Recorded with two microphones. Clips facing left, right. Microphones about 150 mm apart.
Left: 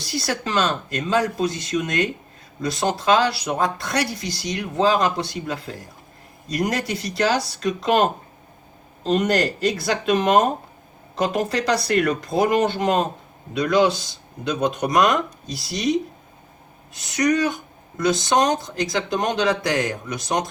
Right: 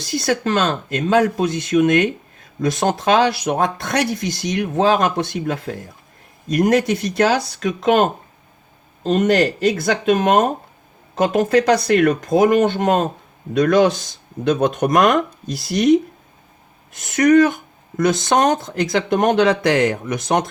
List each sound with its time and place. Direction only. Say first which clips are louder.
0.0 s speech: right 6 dB; 50° right (ahead or behind)